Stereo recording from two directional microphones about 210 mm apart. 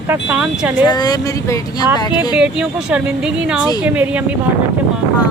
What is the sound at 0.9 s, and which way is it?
Speech, 20° left (ahead or behind).